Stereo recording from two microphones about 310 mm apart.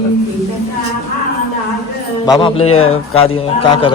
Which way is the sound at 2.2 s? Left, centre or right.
Centre.